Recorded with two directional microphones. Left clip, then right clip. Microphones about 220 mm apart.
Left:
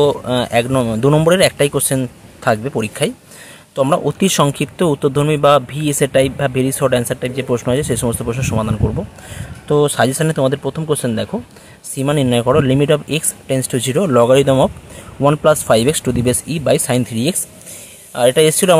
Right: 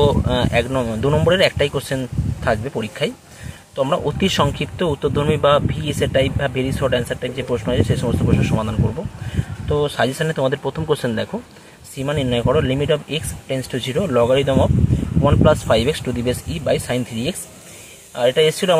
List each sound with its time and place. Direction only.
0.0 s speech: 25° left (ahead or behind)